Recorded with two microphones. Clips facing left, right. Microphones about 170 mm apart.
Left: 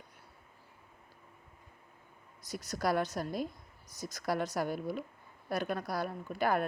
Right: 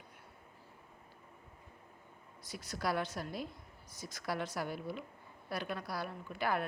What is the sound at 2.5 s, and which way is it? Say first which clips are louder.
Speech: left 5 dB; 40° left (ahead or behind).